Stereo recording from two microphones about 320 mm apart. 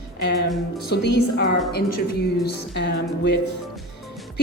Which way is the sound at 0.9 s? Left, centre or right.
Left.